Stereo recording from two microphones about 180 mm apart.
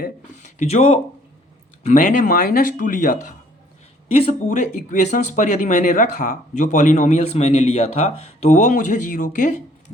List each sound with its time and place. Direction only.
0.0 s speech: 40° left (ahead or behind)
4.4 s speech: 45° left (ahead or behind)